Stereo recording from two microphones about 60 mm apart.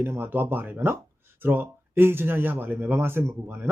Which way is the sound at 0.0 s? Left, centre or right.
Right.